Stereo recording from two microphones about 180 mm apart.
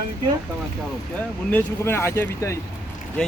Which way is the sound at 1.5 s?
10° left (ahead or behind).